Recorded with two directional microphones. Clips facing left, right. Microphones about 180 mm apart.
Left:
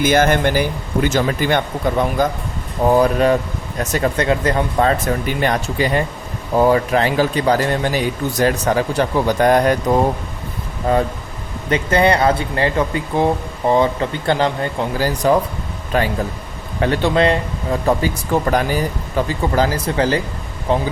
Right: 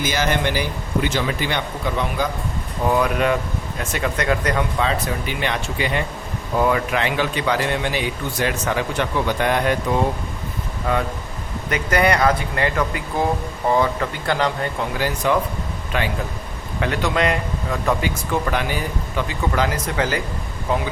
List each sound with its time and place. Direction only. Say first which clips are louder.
0.0 s a man's voice: left 7 dB; 55° left (ahead or behind)
2.8 s speech: left 5 dB; 35° left (ahead or behind)
4.3 s speech: left 1 dB; 30° left (ahead or behind)
4.8 s a man's voice: left 6 dB; 50° left (ahead or behind); by 20.8 s 30° left (ahead or behind)